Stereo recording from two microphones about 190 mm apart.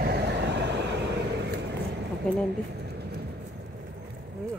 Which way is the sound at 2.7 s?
60° right (ahead or behind).